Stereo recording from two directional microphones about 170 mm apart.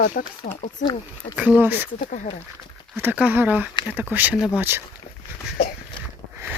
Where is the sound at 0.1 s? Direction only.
55° left (ahead or behind).